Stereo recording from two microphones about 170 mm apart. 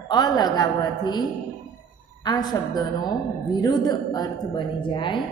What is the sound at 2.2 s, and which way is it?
A woman's voice, 25° left (ahead or behind).